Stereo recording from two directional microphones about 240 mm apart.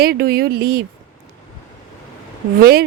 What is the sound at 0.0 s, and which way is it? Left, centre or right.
Speech, right.